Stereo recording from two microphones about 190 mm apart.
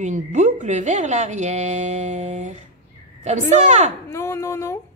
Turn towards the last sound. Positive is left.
turn(degrees=15)  # may be behind; listen again after turning